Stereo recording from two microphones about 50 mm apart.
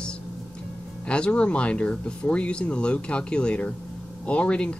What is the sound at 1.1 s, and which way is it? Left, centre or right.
Speech, left.